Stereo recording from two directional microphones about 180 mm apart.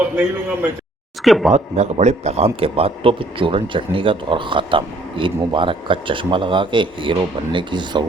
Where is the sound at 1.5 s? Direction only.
40° right (ahead or behind).